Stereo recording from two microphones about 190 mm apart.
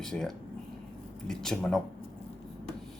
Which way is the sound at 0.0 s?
5° left (ahead or behind).